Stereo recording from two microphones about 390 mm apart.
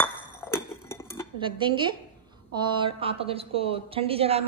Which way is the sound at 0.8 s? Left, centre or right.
Centre.